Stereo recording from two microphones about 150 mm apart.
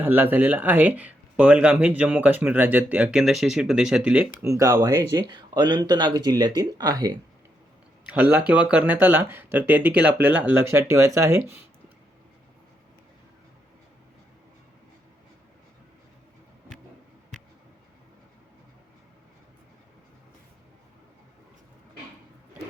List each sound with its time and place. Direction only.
0.0 s speech: 10° right (ahead or behind)
4.4 s speech: 20° right (ahead or behind)
5.3 s speech: 30° right (ahead or behind)
8.0 s speech: 10° right (ahead or behind)